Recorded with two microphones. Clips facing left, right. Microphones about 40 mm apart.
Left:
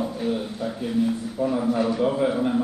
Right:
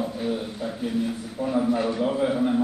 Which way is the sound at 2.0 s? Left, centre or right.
Centre.